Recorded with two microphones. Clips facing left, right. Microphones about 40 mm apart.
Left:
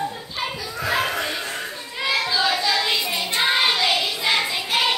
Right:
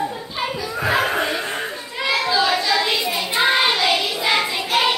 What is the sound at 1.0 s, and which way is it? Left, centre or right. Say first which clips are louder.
Chuckle: right 4 dB; right.